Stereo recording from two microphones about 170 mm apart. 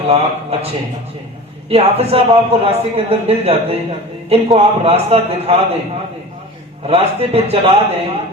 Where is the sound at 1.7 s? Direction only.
35° right (ahead or behind).